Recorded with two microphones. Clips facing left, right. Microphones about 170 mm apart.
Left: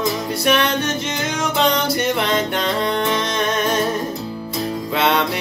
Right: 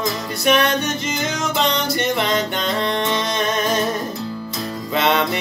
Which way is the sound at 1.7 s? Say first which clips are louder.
Left 1 dB; 10° left (ahead or behind).